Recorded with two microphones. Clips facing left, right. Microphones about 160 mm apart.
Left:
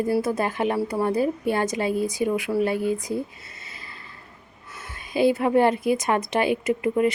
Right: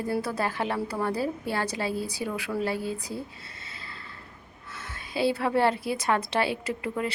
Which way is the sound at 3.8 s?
20° left (ahead or behind).